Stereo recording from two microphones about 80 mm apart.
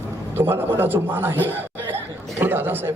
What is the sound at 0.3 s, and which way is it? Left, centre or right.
A man's voice, right.